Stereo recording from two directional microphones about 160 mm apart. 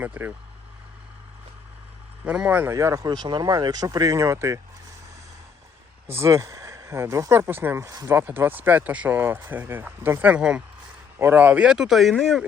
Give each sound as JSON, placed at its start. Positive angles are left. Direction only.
{"t": 0.0, "sound": "speech", "side_deg": -10}
{"t": 2.2, "sound": "speech", "side_deg": -5}
{"t": 6.1, "sound": "speech", "side_deg": -15}